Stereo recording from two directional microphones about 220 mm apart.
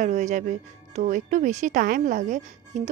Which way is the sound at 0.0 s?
35° right (ahead or behind).